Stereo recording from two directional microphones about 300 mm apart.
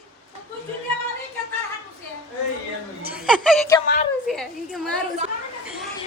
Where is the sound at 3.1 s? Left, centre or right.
Centre.